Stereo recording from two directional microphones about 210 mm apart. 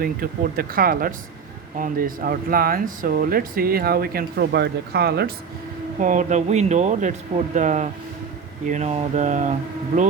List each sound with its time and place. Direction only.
0.0 s speech: 45° right (ahead or behind)
6.0 s speech: 35° right (ahead or behind)